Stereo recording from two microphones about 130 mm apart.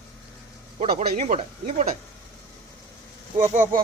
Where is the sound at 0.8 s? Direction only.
55° right (ahead or behind).